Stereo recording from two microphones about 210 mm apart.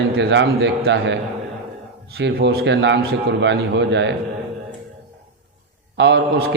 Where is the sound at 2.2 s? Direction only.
50° right (ahead or behind).